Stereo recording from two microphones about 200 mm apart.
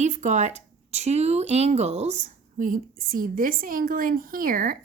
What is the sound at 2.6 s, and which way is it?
A woman's voice, 45° right (ahead or behind).